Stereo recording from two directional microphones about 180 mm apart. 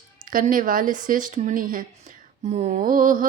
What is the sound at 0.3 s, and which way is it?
Mantra, 50° right (ahead or behind).